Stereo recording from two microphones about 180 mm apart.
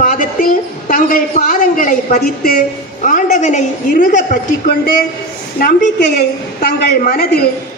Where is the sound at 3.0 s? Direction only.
45° left (ahead or behind).